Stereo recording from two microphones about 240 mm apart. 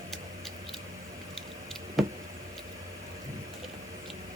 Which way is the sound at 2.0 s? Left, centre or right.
Centre.